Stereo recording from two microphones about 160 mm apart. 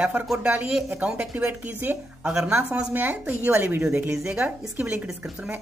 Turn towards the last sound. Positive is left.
turn(degrees=-5)  # may be behind; listen again after turning